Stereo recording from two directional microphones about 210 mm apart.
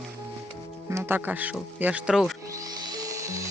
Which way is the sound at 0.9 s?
10° right (ahead or behind).